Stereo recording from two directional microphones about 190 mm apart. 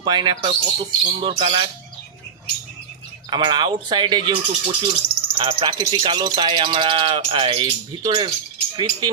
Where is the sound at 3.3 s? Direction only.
25° right (ahead or behind).